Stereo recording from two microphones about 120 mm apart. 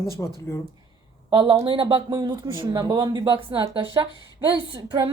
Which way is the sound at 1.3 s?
45° right (ahead or behind).